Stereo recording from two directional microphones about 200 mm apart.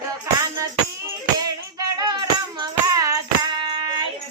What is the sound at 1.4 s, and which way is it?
Music, 20° right (ahead or behind).